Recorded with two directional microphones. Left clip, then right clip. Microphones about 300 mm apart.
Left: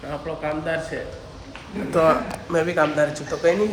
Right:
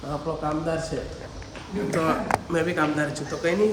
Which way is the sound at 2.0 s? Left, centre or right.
Centre.